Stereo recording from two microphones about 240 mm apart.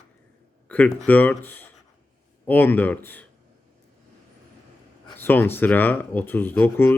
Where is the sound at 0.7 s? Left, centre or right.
Centre.